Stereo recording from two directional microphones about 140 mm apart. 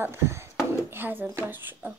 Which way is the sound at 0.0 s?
20° right (ahead or behind).